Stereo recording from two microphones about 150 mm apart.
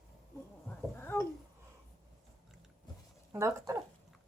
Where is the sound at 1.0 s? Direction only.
15° left (ahead or behind).